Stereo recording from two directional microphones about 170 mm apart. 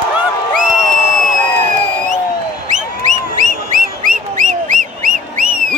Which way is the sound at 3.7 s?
50° right (ahead or behind).